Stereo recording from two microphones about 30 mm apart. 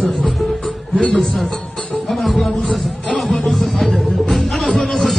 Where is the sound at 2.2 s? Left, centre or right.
Centre.